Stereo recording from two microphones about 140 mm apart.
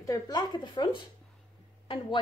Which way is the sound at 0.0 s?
25° left (ahead or behind).